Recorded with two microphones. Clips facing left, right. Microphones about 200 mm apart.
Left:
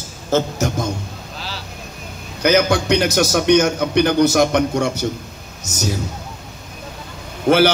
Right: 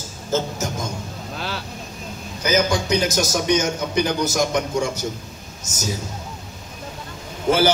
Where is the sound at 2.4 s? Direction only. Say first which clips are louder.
Left 5 dB; 65° left (ahead or behind).